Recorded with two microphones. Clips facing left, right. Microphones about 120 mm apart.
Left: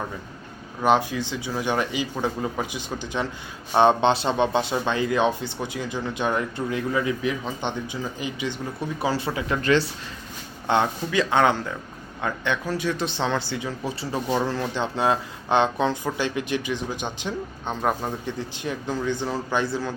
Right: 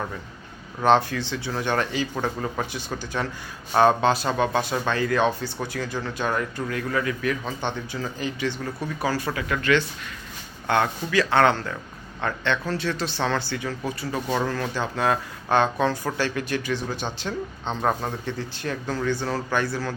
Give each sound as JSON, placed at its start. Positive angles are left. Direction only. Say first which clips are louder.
{"t": 0.8, "sound": "speech", "louder": "right 1 dB", "side_deg": 10}
{"t": 9.6, "sound": "speech", "louder": "left 1 dB", "side_deg": 35}
{"t": 10.7, "sound": "speech", "louder": "left 1 dB", "side_deg": 20}